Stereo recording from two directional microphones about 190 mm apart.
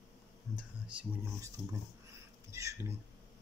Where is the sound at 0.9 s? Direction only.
15° right (ahead or behind).